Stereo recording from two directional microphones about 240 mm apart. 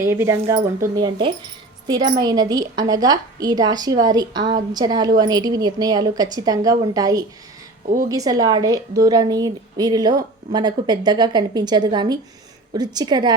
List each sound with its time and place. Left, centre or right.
0.0 s a woman's voice: centre